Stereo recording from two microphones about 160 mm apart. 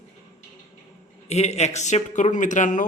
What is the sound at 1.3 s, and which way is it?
A man's voice, 45° left (ahead or behind).